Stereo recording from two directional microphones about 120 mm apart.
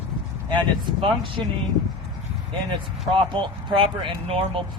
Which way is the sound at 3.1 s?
45° right (ahead or behind).